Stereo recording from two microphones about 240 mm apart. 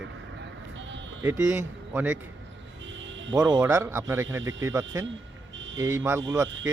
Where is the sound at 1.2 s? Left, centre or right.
Centre.